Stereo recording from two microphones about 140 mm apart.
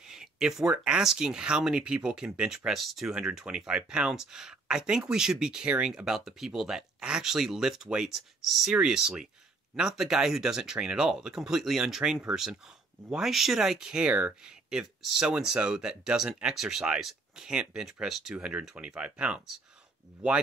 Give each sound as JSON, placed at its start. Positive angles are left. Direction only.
{"t": 0.0, "sound": "speech", "side_deg": -5}